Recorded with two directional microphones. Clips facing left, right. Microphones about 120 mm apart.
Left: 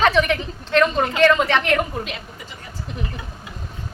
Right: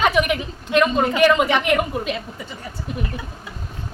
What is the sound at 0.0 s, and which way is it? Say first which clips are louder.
A woman's voice: left 1 dB; 10° right (ahead or behind).